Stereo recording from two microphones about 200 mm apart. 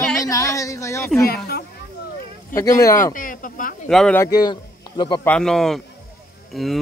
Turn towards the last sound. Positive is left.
turn(degrees=0)  # may be behind; listen again after turning